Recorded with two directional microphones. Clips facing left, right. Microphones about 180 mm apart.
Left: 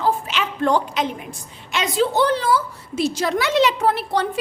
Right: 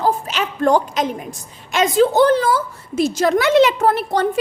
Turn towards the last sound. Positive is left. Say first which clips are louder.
# right 4 dB
turn(degrees=-45)  # may be behind; listen again after turning